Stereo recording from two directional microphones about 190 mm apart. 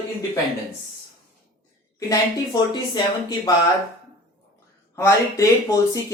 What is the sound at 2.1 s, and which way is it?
Speech, 20° left (ahead or behind).